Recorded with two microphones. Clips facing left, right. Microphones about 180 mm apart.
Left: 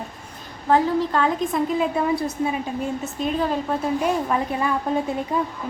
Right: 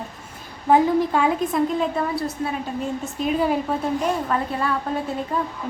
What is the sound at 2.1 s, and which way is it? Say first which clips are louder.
Speech: left 2 dB; 15° left (ahead or behind).